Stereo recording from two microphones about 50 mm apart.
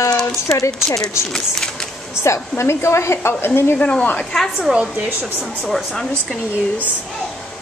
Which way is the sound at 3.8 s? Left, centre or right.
Left.